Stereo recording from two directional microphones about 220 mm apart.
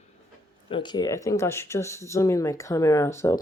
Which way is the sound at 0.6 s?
20° left (ahead or behind).